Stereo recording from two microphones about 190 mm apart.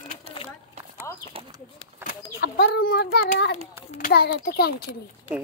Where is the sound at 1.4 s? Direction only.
30° right (ahead or behind).